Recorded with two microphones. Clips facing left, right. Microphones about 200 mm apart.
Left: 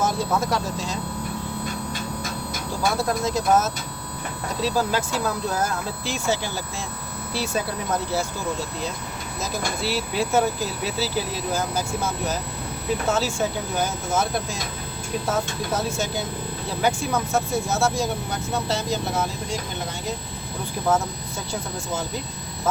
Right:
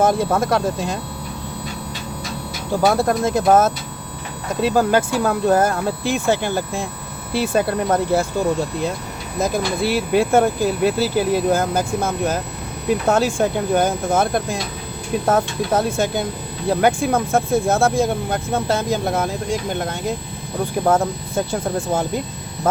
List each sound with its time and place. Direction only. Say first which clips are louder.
0.0 s speech: right 6 dB; 55° right (ahead or behind)
2.8 s speech: right 6 dB; 55° right (ahead or behind)
9.4 s speech: right 8 dB; 55° right (ahead or behind)
22.6 s a sound: right 5 dB; 55° right (ahead or behind)